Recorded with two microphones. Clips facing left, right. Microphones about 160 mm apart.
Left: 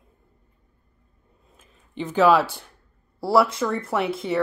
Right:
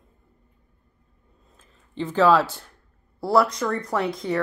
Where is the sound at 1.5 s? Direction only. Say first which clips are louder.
Even; 15° left (ahead or behind).